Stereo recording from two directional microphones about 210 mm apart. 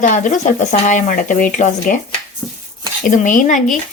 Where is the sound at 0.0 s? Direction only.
40° left (ahead or behind).